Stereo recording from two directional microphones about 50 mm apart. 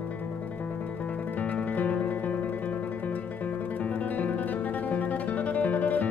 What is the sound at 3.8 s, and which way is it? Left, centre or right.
Music, left.